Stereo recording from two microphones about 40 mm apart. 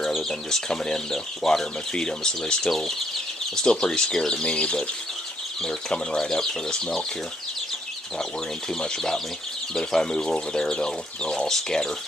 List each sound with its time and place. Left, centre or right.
0.2 s speech: centre
2.7 s speech: centre; by 4.8 s left
5.6 s speech: centre
8.2 s speech: centre